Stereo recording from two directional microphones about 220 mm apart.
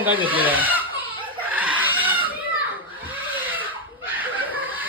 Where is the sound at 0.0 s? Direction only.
10° right (ahead or behind).